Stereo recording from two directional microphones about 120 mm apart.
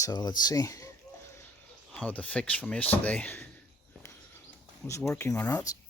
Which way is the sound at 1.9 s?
10° left (ahead or behind).